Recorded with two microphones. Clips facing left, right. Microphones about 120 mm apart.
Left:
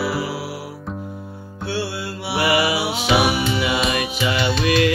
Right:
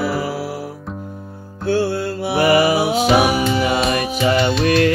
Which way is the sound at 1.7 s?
45° right (ahead or behind).